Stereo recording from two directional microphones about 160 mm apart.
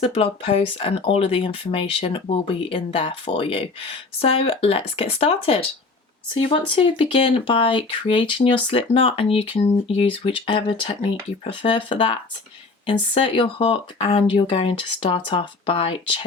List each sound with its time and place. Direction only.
0.0 s speech: 35° left (ahead or behind)